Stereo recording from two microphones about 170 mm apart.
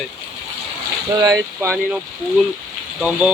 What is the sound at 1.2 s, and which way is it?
Speech, 20° right (ahead or behind).